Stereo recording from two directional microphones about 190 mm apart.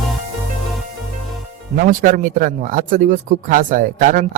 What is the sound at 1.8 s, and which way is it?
Speech, 45° right (ahead or behind).